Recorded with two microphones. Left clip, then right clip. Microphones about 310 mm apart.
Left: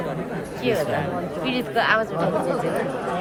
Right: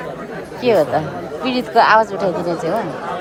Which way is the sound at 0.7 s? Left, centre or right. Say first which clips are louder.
Right 8 dB; centre.